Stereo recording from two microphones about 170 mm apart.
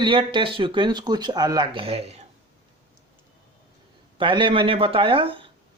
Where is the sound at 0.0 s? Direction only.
30° right (ahead or behind).